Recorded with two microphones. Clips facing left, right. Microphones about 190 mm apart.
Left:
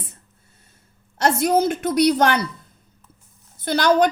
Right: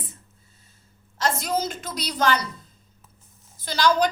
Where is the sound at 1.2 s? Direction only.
60° left (ahead or behind).